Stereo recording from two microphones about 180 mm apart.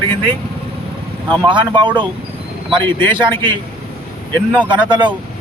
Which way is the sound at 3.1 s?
25° right (ahead or behind).